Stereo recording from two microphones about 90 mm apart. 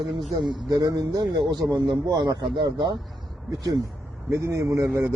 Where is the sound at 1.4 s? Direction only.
55° right (ahead or behind).